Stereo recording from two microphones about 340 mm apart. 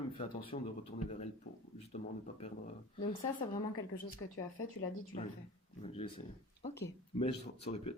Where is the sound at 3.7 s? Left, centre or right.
Left.